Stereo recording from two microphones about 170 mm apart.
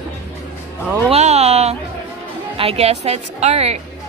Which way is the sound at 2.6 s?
35° right (ahead or behind).